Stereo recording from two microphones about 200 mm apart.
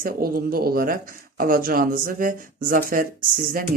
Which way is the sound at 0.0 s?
50° right (ahead or behind).